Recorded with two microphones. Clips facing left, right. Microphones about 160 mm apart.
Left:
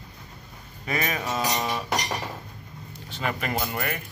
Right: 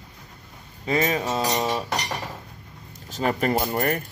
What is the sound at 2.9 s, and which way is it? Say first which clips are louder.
Speech: right 5 dB; 40° right (ahead or behind).